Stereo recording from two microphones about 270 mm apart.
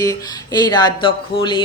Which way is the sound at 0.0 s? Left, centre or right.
Centre.